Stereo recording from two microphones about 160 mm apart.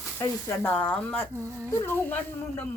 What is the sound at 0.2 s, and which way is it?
Speech, 15° left (ahead or behind).